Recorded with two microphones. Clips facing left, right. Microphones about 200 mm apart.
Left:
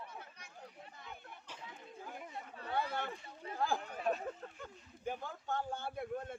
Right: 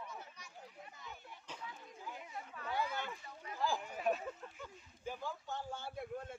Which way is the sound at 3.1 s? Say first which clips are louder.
Left 3 dB; 30° left (ahead or behind).